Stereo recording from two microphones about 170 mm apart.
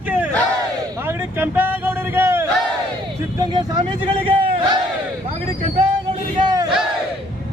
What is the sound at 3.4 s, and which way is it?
Vehicle, 25° right (ahead or behind).